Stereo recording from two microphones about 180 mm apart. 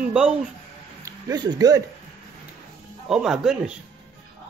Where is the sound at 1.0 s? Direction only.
20° right (ahead or behind).